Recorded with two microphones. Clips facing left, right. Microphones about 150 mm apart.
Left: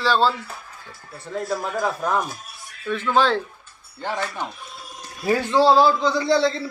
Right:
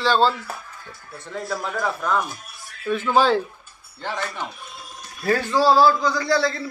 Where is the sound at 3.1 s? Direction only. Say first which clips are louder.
Right 1 dB; 5° right (ahead or behind).